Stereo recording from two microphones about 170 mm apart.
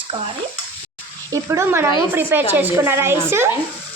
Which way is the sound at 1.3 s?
15° right (ahead or behind).